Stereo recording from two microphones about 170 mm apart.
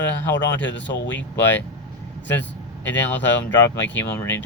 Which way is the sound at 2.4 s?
10° left (ahead or behind).